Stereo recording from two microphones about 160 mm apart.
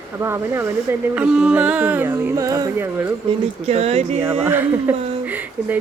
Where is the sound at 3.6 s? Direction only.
40° right (ahead or behind).